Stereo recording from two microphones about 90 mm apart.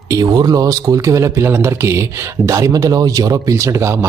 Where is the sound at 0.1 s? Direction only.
45° right (ahead or behind).